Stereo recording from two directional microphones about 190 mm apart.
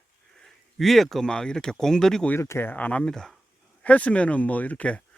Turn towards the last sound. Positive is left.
turn(degrees=5)  # may be behind; listen again after turning